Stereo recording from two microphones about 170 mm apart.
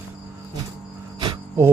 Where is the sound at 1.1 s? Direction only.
30° right (ahead or behind).